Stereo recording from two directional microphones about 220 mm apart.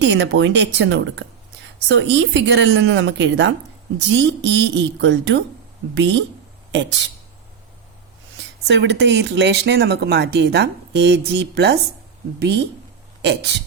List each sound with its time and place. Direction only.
0.0 s speech: 55° right (ahead or behind)
8.6 s speech: 55° right (ahead or behind)
13.2 s speech: 50° right (ahead or behind)